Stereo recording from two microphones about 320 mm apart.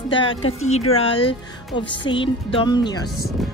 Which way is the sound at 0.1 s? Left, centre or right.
Centre.